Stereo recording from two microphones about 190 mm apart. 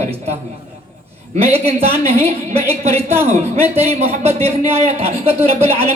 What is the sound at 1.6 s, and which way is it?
Speech, 35° right (ahead or behind).